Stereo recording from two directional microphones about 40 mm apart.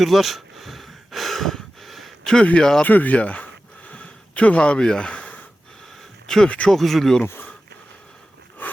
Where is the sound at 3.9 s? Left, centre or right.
Left.